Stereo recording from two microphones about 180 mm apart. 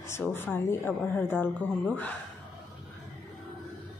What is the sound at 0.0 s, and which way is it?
A woman's voice, 15° left (ahead or behind).